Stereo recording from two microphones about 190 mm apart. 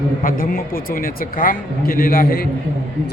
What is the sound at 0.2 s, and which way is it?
Speech, 50° left (ahead or behind).